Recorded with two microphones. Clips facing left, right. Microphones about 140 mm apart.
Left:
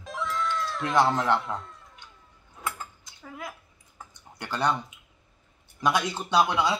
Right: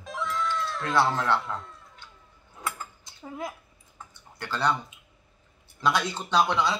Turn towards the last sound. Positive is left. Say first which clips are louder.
# left 1 dB
turn(degrees=10)  # may be behind; listen again after turning